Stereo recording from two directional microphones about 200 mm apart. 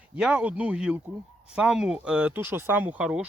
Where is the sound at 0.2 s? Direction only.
5° right (ahead or behind).